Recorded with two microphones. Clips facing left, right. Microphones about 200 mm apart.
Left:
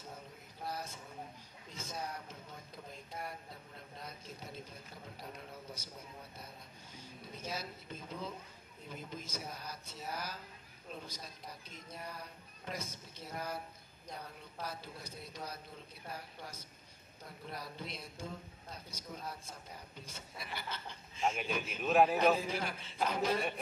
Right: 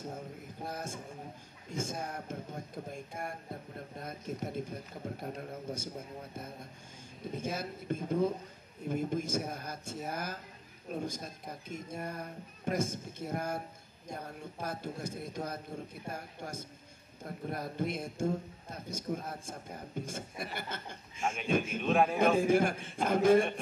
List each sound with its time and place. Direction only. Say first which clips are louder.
0.7 s speech: right 2 dB; 50° right (ahead or behind)
21.8 s a man's voice: left 2 dB; 5° left (ahead or behind)
22.4 s speech: right 12 dB; 50° right (ahead or behind)